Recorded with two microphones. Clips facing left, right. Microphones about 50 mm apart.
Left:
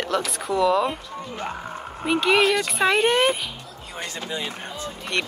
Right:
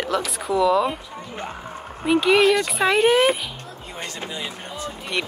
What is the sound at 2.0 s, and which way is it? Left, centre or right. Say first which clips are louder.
A woman's voice: right 2 dB; centre.